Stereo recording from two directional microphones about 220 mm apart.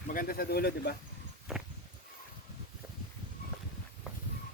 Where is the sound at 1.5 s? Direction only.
Centre (ahead or behind).